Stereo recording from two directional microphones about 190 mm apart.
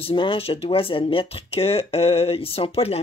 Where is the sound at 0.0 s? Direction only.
25° left (ahead or behind).